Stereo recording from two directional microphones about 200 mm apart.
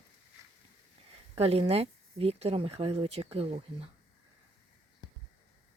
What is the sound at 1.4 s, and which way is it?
Speech, 30° right (ahead or behind).